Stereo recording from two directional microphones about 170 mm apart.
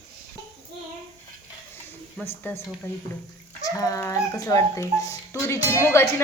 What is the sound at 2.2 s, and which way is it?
Speech, 15° left (ahead or behind).